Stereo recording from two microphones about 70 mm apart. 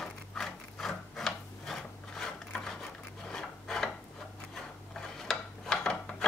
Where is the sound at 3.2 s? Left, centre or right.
Centre.